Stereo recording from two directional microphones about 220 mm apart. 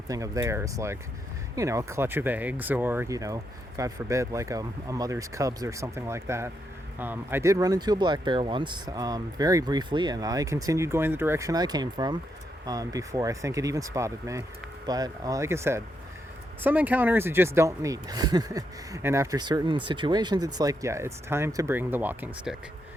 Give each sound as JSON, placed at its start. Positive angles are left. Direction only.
{"t": 0.1, "sound": "speech", "side_deg": -15}